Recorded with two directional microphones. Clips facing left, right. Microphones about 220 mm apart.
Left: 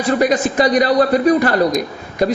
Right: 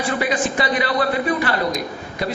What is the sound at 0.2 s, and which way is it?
A man's voice, 40° left (ahead or behind).